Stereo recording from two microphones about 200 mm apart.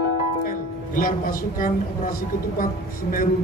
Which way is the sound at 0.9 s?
45° left (ahead or behind).